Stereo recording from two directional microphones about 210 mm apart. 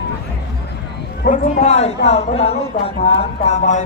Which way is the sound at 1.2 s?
35° left (ahead or behind).